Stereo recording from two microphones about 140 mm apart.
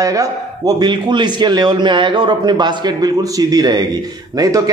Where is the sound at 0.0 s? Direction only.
25° right (ahead or behind).